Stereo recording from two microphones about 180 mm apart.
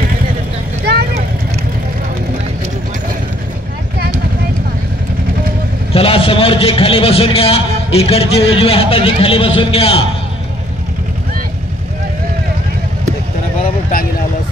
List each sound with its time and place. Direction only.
0.8 s vehicle: 65° right (ahead or behind)
5.9 s a man's voice: 30° left (ahead or behind)